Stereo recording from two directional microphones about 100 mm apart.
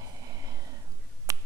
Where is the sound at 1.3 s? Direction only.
35° right (ahead or behind).